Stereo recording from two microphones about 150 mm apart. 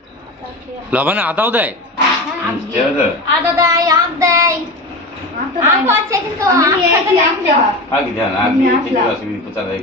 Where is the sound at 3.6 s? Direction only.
20° right (ahead or behind).